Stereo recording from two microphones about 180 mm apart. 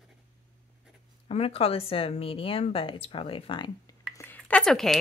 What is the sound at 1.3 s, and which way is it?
A woman's voice, 35° left (ahead or behind).